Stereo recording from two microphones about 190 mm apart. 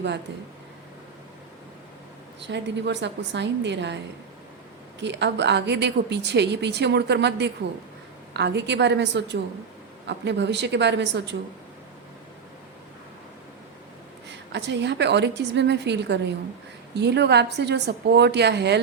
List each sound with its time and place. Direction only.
2.4 s a woman's voice: 65° right (ahead or behind)
14.3 s a woman's voice: 65° right (ahead or behind)